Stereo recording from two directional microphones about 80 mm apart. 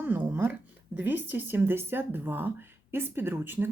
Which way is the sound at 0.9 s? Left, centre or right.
Right.